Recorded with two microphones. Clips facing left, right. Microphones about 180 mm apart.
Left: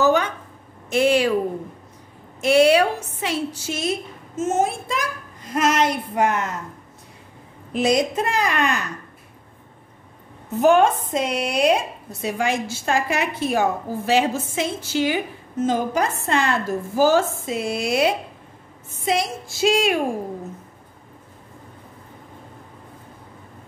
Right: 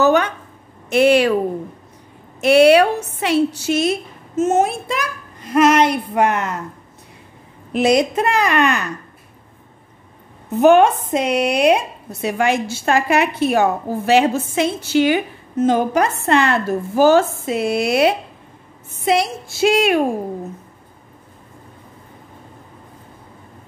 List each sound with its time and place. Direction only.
0.0 s a sound: 65° right (ahead or behind)
0.8 s a woman's voice: 70° right (ahead or behind)
2.4 s a woman's voice: 65° right (ahead or behind)
7.7 s a woman's voice: 65° right (ahead or behind)
10.6 s speech: 65° right (ahead or behind)